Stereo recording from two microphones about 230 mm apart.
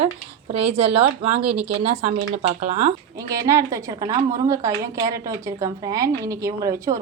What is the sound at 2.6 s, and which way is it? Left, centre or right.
Speech, right.